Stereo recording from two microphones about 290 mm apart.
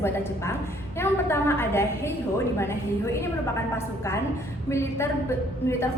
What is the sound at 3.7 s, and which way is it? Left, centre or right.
A woman's voice, centre.